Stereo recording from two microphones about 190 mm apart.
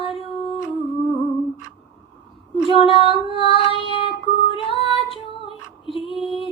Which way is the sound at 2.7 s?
30° left (ahead or behind).